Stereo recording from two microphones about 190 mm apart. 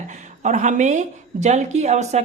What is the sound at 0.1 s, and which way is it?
A woman's voice, 40° right (ahead or behind).